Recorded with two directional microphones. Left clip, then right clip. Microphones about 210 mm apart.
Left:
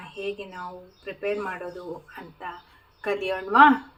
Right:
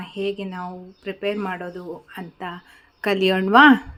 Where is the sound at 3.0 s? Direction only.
45° right (ahead or behind).